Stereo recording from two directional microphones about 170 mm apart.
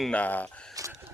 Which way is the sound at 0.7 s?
20° right (ahead or behind).